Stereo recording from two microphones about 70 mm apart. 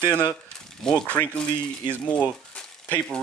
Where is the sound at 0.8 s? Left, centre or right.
Centre.